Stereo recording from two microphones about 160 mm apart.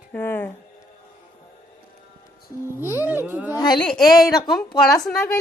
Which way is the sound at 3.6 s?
25° left (ahead or behind).